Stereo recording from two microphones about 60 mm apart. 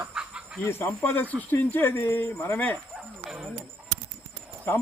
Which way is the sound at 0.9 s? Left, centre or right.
Left.